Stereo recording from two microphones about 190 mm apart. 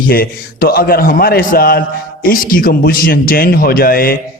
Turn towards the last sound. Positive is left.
turn(degrees=50)  # may be behind; listen again after turning